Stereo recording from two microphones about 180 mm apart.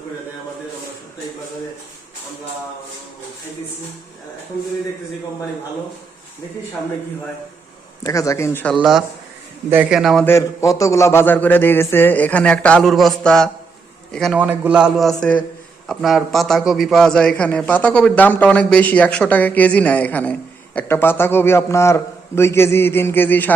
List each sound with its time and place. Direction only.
8.0 s a man's voice: 20° left (ahead or behind)
8.7 s a man's voice: centre (ahead or behind)
10.2 s a man's voice: 15° left (ahead or behind)
14.3 s a man's voice: 10° right (ahead or behind); by 23.6 s 10° left (ahead or behind)